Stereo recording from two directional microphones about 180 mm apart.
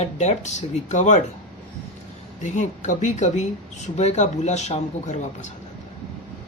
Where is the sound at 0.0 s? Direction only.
40° left (ahead or behind).